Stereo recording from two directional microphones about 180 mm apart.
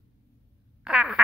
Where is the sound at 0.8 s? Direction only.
5° right (ahead or behind).